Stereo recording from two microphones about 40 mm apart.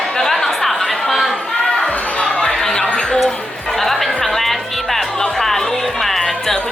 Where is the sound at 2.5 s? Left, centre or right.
Centre.